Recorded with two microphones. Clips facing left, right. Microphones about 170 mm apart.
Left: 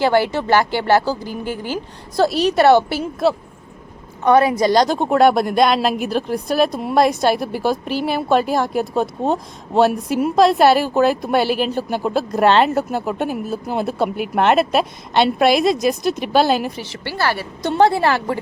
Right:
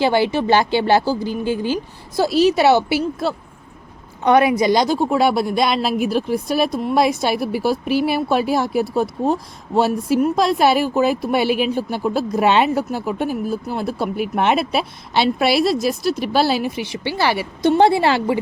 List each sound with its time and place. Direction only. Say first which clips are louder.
0.0 s a woman's voice: even; 15° right (ahead or behind)
2.2 s speech: even; 5° right (ahead or behind)
4.2 s a woman's voice: even; 15° right (ahead or behind)
14.3 s a woman's voice: left 4 dB; centre (ahead or behind)